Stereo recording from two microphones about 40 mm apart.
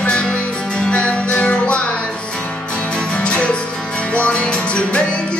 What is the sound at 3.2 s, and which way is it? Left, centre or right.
Music, left.